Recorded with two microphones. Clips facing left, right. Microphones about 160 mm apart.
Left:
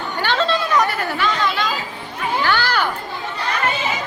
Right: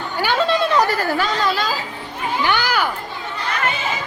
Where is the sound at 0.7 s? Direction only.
35° right (ahead or behind).